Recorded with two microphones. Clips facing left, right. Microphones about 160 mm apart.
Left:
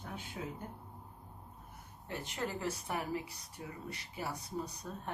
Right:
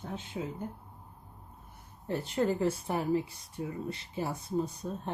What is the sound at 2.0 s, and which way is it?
A woman's voice, 35° right (ahead or behind).